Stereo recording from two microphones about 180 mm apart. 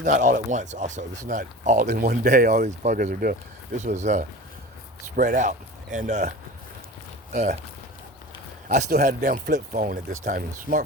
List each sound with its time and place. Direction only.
0.0 s speech: 45° right (ahead or behind)
1.9 s speech: 55° right (ahead or behind)
3.8 s speech: 40° right (ahead or behind)
8.7 s speech: 45° right (ahead or behind)